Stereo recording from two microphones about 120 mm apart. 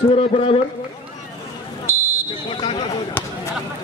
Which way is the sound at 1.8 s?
20° right (ahead or behind).